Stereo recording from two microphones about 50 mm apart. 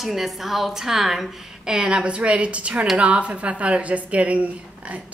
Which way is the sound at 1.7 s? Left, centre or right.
Right.